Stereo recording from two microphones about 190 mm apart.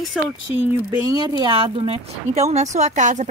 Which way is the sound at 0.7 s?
20° right (ahead or behind).